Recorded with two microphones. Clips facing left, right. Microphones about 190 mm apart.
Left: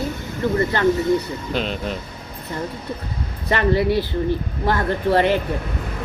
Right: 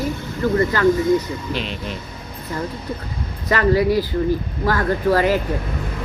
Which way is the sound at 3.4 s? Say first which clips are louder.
Right 2 dB; 25° left (ahead or behind).